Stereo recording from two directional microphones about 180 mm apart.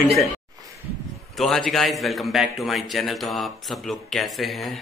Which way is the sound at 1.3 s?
Centre (ahead or behind).